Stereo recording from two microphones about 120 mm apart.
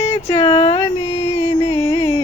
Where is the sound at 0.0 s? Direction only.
60° left (ahead or behind).